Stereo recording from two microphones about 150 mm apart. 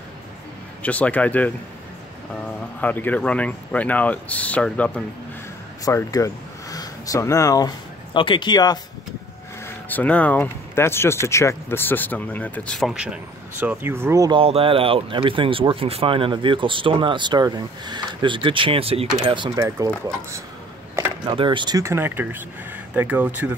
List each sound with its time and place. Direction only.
0.8 s speech: 10° left (ahead or behind)
2.8 s speech: 10° left (ahead or behind)
5.9 s speech: 20° left (ahead or behind)
9.8 s speech: 10° left (ahead or behind); by 14.3 s 20° right (ahead or behind)
14.3 s speech: 40° right (ahead or behind)
19.5 s speech: 20° right (ahead or behind)
21.4 s speech: 30° right (ahead or behind); by 23.5 s 10° right (ahead or behind)